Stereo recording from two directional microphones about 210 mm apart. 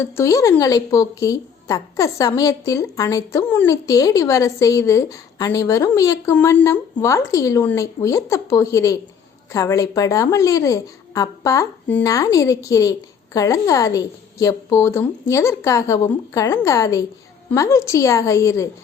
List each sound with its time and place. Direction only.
0.0 s speech: 15° left (ahead or behind)